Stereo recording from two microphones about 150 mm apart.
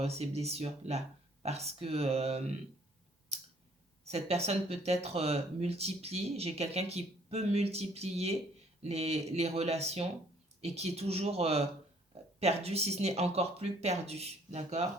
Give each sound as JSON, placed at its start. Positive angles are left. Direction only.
{"t": 0.0, "sound": "speech", "side_deg": -45}
{"t": 4.0, "sound": "speech", "side_deg": -45}